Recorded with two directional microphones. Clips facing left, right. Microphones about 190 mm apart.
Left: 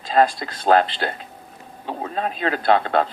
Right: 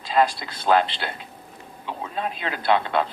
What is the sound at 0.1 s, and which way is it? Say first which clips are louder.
Speech: left 3 dB; 45° left (ahead or behind).